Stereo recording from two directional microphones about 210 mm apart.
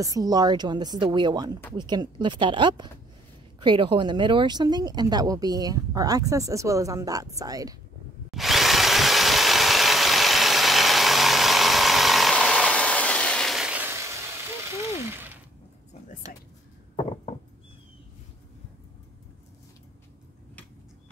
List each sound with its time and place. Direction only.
0.0 s a woman's voice: 15° right (ahead or behind)
8.3 s drill: centre (ahead or behind)
14.7 s mechanisms: 10° right (ahead or behind)